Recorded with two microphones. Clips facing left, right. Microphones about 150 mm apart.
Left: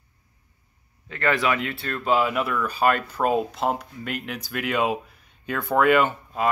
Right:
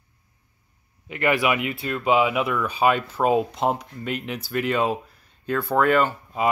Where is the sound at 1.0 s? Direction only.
15° right (ahead or behind); by 6.0 s 5° left (ahead or behind).